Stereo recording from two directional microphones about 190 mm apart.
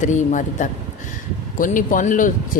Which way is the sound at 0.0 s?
40° left (ahead or behind).